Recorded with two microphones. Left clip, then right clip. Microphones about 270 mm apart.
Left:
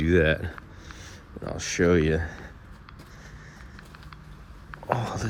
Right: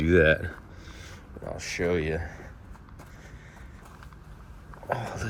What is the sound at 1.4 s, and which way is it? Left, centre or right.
Speech, left.